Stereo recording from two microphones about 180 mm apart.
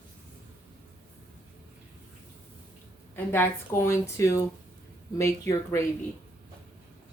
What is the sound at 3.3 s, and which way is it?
A woman's voice, 15° left (ahead or behind).